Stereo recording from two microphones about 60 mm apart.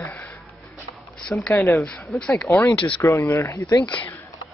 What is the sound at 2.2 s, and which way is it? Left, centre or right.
Speech, centre.